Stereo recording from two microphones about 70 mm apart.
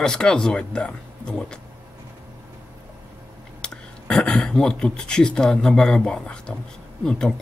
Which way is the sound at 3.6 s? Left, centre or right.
Centre.